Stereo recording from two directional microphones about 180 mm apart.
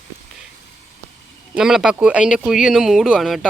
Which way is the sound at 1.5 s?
5° right (ahead or behind).